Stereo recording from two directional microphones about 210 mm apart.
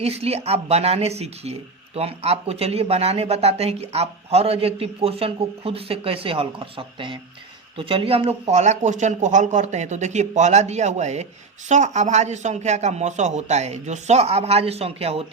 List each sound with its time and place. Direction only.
0.0 s speech: 30° right (ahead or behind)